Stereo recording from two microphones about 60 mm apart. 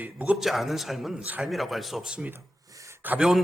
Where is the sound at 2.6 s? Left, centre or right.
Right.